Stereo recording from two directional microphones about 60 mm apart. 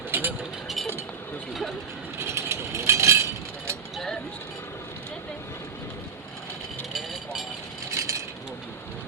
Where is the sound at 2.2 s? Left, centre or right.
Right.